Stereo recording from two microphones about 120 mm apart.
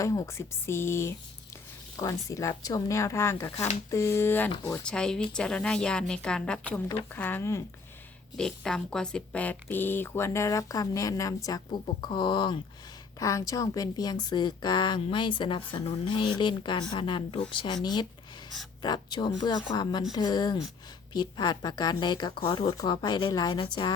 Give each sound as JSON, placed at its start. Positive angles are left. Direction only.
{"t": 0.0, "sound": "speech", "side_deg": 25}
{"t": 2.0, "sound": "a woman's voice", "side_deg": 35}
{"t": 8.4, "sound": "a woman's voice", "side_deg": 5}
{"t": 13.1, "sound": "a woman's voice", "side_deg": 25}
{"t": 18.8, "sound": "a woman's voice", "side_deg": 35}